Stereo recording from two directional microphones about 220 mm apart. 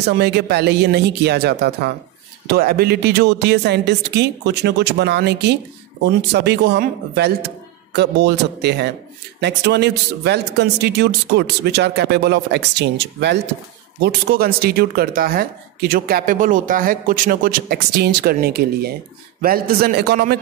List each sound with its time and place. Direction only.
0.0 s speech: 50° right (ahead or behind)